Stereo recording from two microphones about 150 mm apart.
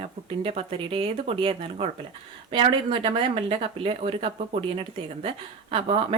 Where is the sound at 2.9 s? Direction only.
35° right (ahead or behind).